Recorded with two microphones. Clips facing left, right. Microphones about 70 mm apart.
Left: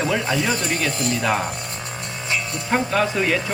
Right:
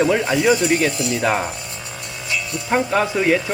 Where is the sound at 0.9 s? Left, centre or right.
Left.